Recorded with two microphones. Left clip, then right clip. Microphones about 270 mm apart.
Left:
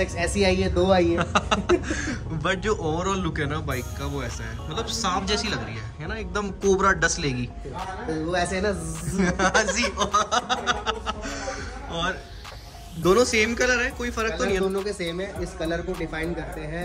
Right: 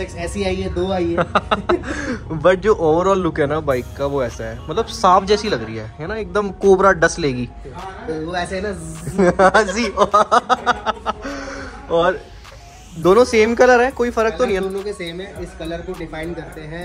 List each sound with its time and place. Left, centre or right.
0.0 s speech: centre